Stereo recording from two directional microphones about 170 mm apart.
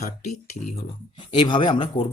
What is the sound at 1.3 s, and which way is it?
Speech, 30° left (ahead or behind).